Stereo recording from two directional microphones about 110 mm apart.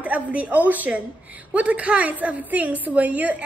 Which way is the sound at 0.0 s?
15° right (ahead or behind).